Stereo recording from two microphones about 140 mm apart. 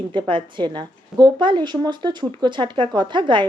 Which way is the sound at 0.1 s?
35° right (ahead or behind).